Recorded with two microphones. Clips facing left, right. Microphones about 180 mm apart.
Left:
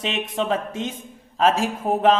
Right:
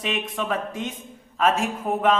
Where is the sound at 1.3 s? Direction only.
30° left (ahead or behind).